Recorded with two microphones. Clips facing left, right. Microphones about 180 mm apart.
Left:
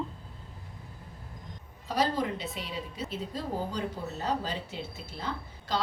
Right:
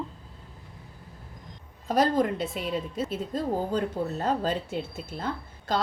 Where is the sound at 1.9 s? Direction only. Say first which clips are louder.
Right 6 dB; 50° right (ahead or behind).